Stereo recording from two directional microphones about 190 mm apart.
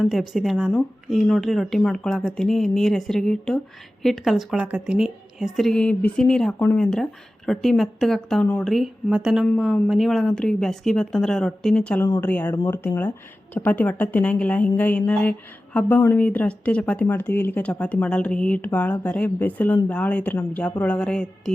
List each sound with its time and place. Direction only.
0.0 s a woman's voice: centre (ahead or behind)
12.0 s speech: 20° left (ahead or behind)
12.3 s speech: 10° left (ahead or behind)